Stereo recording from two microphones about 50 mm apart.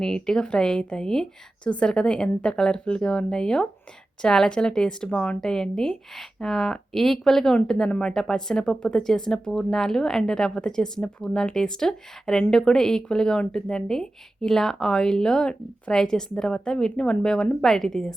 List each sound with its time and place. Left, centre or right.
0.0 s speech: centre